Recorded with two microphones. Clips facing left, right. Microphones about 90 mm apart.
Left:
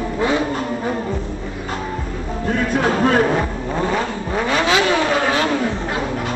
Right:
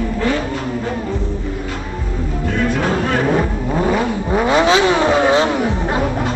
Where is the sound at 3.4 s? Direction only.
10° right (ahead or behind).